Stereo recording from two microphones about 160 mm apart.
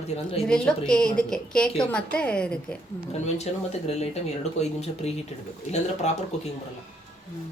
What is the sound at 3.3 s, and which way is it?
Speech, 45° left (ahead or behind).